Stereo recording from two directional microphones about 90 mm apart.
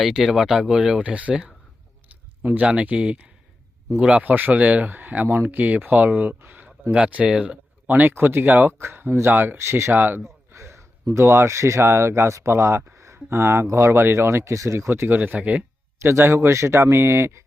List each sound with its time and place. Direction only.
0.0 s speech: 5° right (ahead or behind)
16.0 s speech: 30° right (ahead or behind)